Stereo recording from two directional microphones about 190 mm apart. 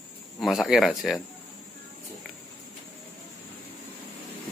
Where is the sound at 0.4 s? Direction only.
Centre (ahead or behind).